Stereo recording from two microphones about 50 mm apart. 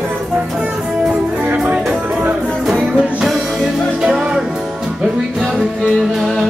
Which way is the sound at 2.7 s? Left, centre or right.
Centre.